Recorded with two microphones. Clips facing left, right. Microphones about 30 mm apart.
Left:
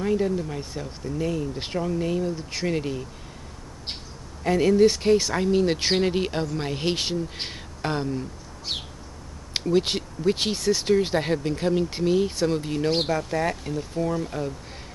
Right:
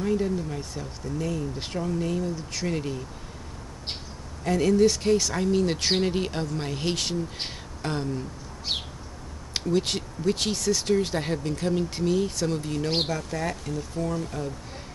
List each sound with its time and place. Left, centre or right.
0.0 s speech: centre
4.4 s speech: centre
8.7 s bird: centre
9.7 s speech: centre